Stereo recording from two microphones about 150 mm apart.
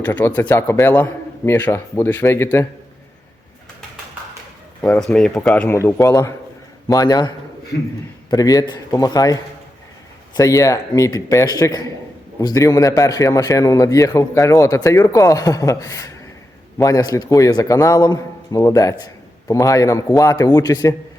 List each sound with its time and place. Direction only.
0.0 s speech: 10° left (ahead or behind)
4.8 s speech: 5° left (ahead or behind)
5.7 s a man's voice: 20° left (ahead or behind)